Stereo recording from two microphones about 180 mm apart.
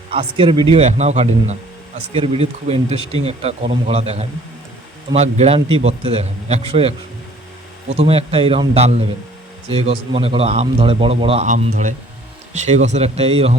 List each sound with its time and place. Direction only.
0.1 s a man's voice: 30° right (ahead or behind)
11.4 s a man's voice: 45° right (ahead or behind)